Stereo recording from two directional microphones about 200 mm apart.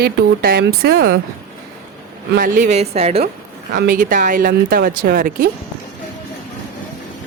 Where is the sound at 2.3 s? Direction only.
40° right (ahead or behind).